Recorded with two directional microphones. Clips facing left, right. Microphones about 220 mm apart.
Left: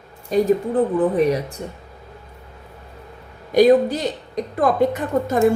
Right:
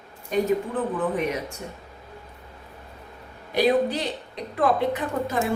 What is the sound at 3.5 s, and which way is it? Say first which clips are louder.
A woman's voice: left 7 dB; 45° left (ahead or behind).